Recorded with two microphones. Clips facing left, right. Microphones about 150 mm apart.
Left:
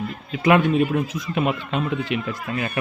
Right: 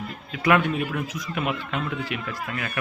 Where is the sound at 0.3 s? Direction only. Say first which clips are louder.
Left 4 dB; 25° left (ahead or behind).